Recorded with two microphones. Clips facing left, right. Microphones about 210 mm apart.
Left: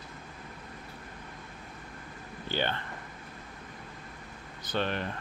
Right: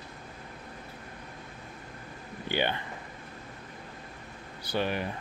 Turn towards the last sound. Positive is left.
turn(degrees=-10)  # may be behind; listen again after turning